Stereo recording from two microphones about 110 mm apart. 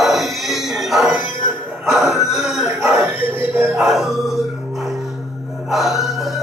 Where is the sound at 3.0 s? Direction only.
20° right (ahead or behind).